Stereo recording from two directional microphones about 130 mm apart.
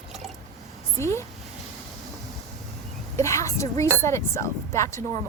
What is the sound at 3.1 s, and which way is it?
Speech, 20° left (ahead or behind).